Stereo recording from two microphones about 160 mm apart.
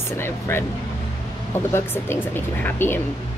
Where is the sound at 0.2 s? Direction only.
15° left (ahead or behind).